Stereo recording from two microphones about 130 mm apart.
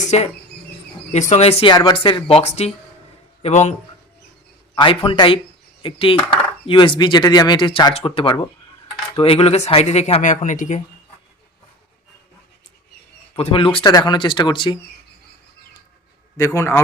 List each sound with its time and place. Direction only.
0.0 s insect: 60° left (ahead or behind)
1.1 s speech: 60° left (ahead or behind)
1.7 s speech: 35° left (ahead or behind); by 3.8 s 60° left (ahead or behind)
4.8 s speech: 40° left (ahead or behind); by 10.8 s 75° left (ahead or behind)
13.3 s speech: 45° left (ahead or behind)
16.4 s a man's voice: 20° left (ahead or behind)